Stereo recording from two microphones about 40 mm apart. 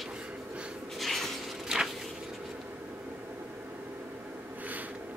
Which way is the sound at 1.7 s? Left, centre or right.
Centre.